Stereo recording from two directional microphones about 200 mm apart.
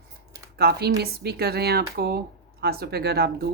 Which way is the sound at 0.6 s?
55° right (ahead or behind).